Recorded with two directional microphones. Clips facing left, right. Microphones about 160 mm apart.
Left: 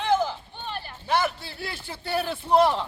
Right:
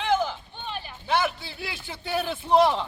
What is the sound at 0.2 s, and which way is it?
Run, 5° left (ahead or behind).